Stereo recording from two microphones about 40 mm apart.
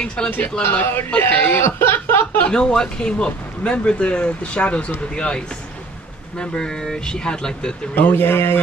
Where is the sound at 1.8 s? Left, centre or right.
Left.